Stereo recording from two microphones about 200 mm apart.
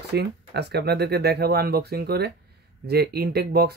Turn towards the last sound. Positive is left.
turn(degrees=-50)  # may be behind; listen again after turning